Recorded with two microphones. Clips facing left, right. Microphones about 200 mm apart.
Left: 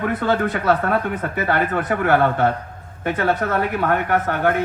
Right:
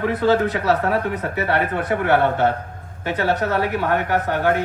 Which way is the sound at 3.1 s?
55° left (ahead or behind).